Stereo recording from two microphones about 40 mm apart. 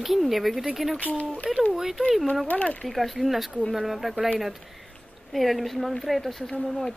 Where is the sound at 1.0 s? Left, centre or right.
Left.